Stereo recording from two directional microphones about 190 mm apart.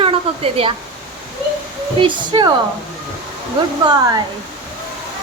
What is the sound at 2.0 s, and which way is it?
Speech, 25° right (ahead or behind).